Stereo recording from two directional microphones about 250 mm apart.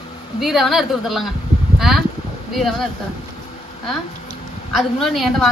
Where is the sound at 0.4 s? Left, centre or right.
Centre.